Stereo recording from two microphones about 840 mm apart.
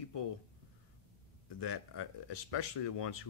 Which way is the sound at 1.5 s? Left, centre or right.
Left.